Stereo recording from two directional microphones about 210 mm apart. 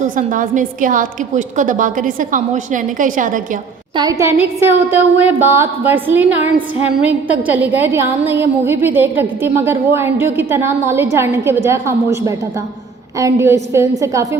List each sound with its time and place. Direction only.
0.0 s a woman's voice: 40° right (ahead or behind)
3.9 s a woman's voice: 15° right (ahead or behind)